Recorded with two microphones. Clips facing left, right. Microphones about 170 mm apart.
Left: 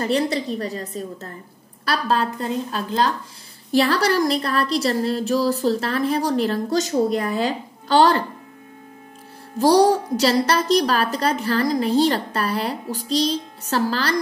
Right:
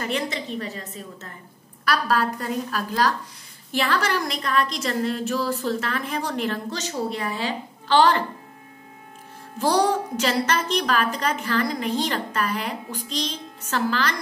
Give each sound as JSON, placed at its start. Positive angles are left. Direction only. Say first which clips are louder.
{"t": 0.0, "sound": "a woman's voice", "louder": "left 6 dB", "side_deg": 35}
{"t": 1.9, "sound": "a woman's voice", "louder": "left 1 dB", "side_deg": 25}
{"t": 3.7, "sound": "a woman's voice", "louder": "left 6 dB", "side_deg": 35}
{"t": 9.6, "sound": "a woman's voice", "louder": "left 6 dB", "side_deg": 35}